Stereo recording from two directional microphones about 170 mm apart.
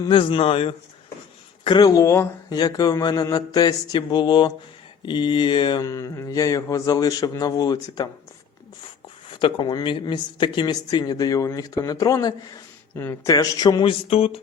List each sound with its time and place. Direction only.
0.0 s a man's voice: 30° left (ahead or behind)
1.6 s mantra: 25° left (ahead or behind)
9.3 s mantra: 25° left (ahead or behind)